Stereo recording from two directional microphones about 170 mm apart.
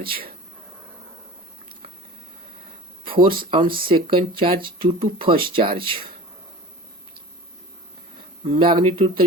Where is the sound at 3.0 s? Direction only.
30° right (ahead or behind).